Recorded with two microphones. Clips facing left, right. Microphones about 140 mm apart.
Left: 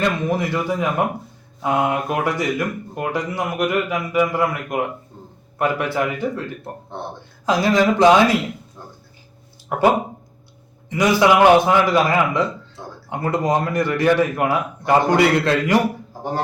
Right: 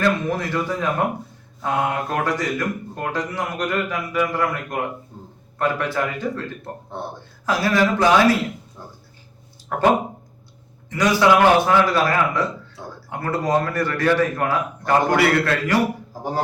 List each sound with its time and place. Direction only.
0.0 s a man's voice: 15° left (ahead or behind)
7.4 s a man's voice: 20° left (ahead or behind)
9.6 s a man's voice: 10° left (ahead or behind)